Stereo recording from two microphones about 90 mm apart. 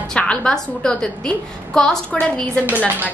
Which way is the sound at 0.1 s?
10° left (ahead or behind).